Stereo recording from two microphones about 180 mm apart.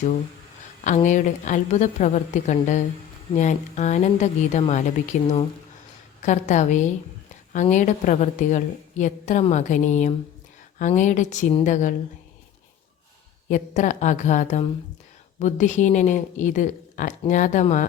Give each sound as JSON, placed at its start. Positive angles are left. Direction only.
{"t": 0.9, "sound": "a woman's voice", "side_deg": 45}
{"t": 13.5, "sound": "a woman's voice", "side_deg": 45}